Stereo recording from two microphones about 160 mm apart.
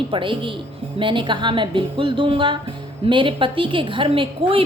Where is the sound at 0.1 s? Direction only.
30° right (ahead or behind).